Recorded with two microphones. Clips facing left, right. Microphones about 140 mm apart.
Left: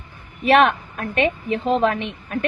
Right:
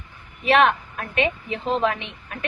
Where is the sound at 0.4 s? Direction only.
45° left (ahead or behind).